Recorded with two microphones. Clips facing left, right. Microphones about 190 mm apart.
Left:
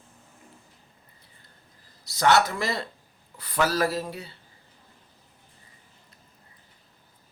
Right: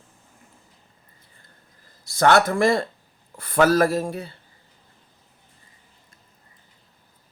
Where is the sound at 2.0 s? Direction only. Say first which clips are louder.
Right 4 dB; 50° right (ahead or behind).